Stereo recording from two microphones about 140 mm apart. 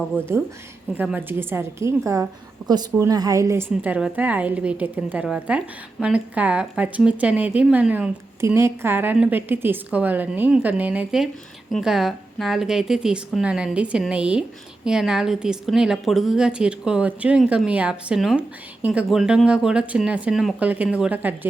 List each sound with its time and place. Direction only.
0.1 s a woman's voice: 15° right (ahead or behind)